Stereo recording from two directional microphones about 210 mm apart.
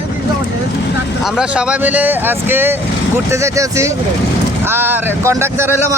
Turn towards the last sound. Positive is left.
turn(degrees=-15)  # may be behind; listen again after turning